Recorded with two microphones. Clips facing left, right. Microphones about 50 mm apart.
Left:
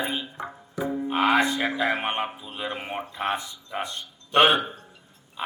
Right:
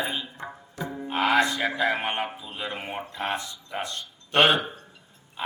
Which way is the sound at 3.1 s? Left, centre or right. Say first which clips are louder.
Left 2 dB; centre.